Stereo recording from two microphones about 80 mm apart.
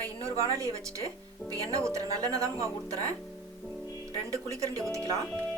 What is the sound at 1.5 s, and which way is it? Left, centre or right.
Speech, right.